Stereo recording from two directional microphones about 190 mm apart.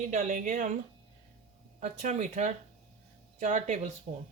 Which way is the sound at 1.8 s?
40° right (ahead or behind).